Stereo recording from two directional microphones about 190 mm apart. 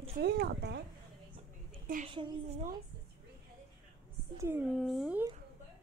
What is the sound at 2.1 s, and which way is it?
Speech, 25° right (ahead or behind).